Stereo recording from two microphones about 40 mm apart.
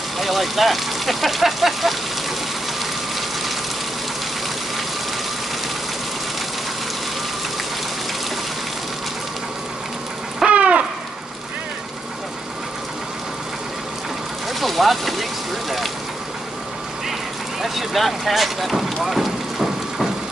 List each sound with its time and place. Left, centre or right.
0.2 s speech: centre
10.4 s owl: right
14.6 s a sound: centre
17.6 s vehicle: centre